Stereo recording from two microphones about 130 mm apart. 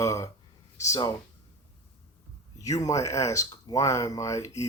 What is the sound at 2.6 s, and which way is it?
Speech, 25° left (ahead or behind).